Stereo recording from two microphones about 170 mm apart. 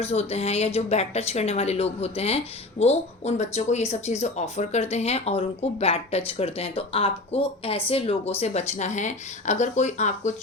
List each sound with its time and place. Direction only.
0.0 s speech: 35° left (ahead or behind)